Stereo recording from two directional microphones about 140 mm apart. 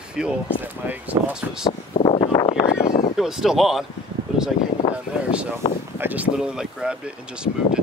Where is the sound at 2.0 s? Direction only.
35° left (ahead or behind).